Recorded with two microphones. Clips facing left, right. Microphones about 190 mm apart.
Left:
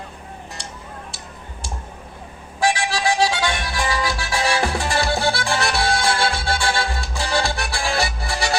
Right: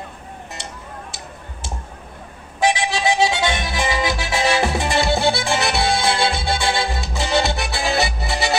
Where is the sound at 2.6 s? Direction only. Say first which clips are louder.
Right 1 dB; 20° right (ahead or behind).